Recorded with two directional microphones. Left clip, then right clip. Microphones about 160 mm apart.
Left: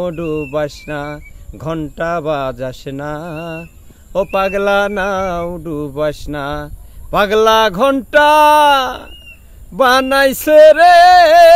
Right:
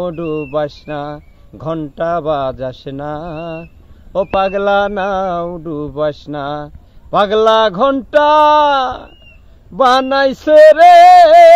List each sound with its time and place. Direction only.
0.0 s mantra: 20° left (ahead or behind)